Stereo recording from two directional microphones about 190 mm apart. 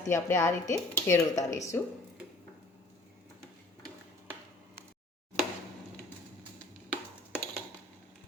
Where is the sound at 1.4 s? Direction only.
40° left (ahead or behind).